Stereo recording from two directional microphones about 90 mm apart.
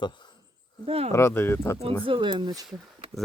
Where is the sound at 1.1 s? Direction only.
30° left (ahead or behind).